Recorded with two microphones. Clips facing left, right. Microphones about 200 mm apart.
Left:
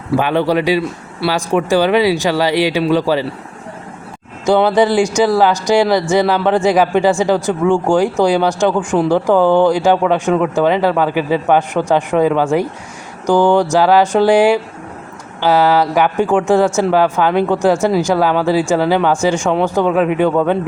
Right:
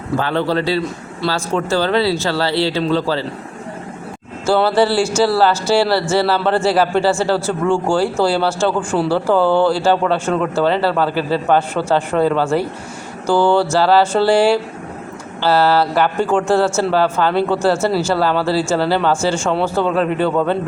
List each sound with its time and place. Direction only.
0.2 s speech: 15° left (ahead or behind)
4.4 s speech: 15° left (ahead or behind)